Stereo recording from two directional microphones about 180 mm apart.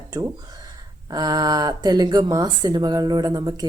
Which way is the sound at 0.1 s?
20° right (ahead or behind).